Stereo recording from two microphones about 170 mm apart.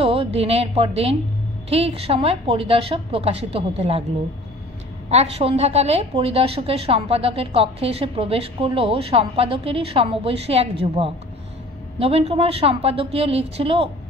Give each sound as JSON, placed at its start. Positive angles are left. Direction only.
{"t": 0.0, "sound": "a woman's voice", "side_deg": -35}
{"t": 5.1, "sound": "a woman's voice", "side_deg": -35}